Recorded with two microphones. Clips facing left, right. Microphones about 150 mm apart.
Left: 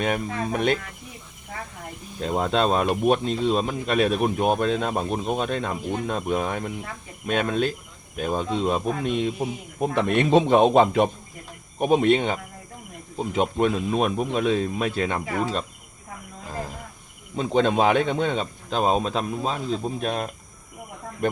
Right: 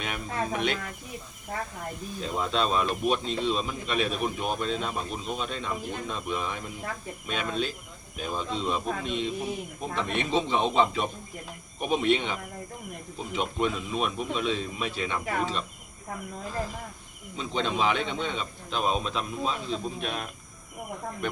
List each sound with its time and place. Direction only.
0.0 s speech: 45° left (ahead or behind)
2.2 s speech: 50° left (ahead or behind)
17.3 s speech: 50° left (ahead or behind)